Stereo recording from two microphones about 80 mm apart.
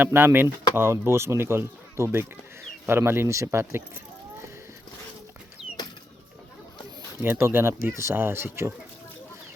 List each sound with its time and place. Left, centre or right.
0.0 s speech: right
7.2 s speech: right